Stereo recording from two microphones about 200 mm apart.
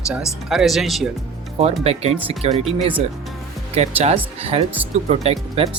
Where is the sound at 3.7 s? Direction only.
35° right (ahead or behind).